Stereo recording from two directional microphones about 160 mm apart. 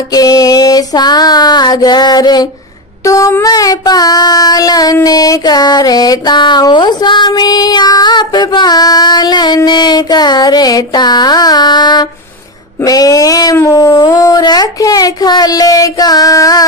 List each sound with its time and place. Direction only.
0.1 s child singing: 25° left (ahead or behind)